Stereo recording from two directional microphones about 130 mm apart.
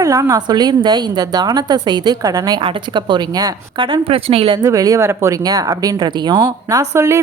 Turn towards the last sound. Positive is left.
turn(degrees=-20)  # may be behind; listen again after turning